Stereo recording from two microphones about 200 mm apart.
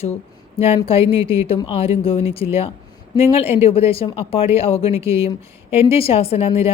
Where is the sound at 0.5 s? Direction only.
30° left (ahead or behind).